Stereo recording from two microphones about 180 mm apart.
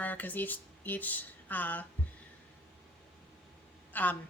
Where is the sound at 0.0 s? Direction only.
10° left (ahead or behind).